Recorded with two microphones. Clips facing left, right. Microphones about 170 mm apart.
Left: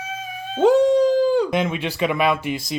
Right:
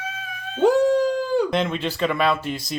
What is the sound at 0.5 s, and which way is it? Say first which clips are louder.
Howl: left 2 dB; 25° left (ahead or behind).